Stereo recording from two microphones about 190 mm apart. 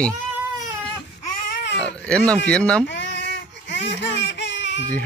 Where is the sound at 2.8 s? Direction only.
65° left (ahead or behind).